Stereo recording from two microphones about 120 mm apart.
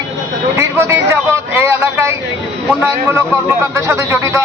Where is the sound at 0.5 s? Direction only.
20° right (ahead or behind).